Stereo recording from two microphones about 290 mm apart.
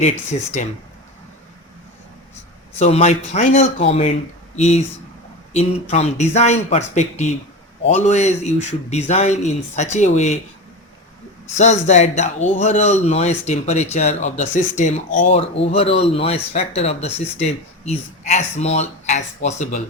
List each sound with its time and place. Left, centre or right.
0.3 s speech: left
2.7 s speech: left
11.5 s speech: left